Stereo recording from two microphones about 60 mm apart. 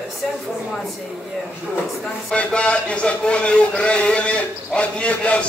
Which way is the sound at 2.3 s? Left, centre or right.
Centre.